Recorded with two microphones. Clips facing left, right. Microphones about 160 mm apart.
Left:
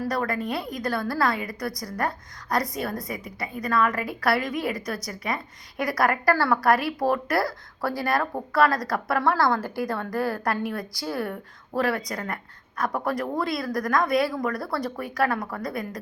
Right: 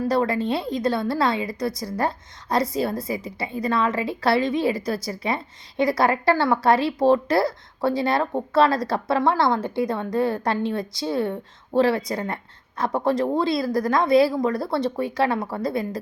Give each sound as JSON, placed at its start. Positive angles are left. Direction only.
{"t": 0.0, "sound": "a woman's voice", "side_deg": -25}